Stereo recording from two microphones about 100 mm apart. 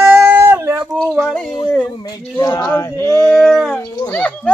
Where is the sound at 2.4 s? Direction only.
40° left (ahead or behind).